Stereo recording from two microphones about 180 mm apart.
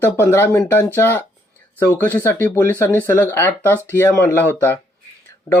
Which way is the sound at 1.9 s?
15° left (ahead or behind).